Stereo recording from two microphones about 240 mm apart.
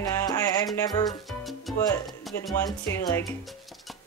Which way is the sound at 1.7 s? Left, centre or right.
Centre.